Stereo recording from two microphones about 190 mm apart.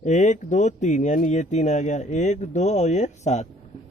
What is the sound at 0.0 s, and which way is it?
Speech, 40° left (ahead or behind).